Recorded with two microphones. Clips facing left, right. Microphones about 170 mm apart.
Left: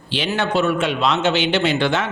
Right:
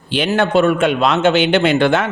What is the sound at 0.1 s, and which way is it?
A man's voice, 50° right (ahead or behind).